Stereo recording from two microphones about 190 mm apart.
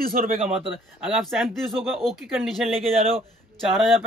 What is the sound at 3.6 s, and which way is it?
Speech, centre (ahead or behind).